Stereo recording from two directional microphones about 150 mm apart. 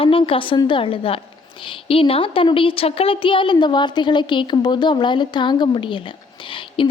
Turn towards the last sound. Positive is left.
turn(degrees=35)  # may be behind; listen again after turning